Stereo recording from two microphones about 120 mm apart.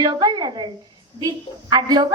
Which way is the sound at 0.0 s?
35° right (ahead or behind).